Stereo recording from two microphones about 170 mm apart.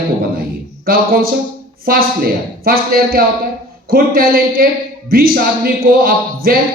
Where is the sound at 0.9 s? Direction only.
60° right (ahead or behind).